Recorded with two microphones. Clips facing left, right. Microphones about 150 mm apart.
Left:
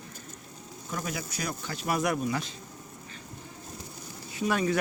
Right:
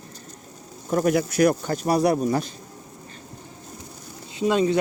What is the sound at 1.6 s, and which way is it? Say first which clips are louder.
Speech: right 8 dB; 45° right (ahead or behind).